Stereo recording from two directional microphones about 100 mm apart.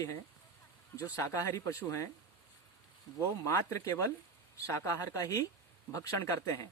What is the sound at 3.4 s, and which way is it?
Speech, 30° left (ahead or behind).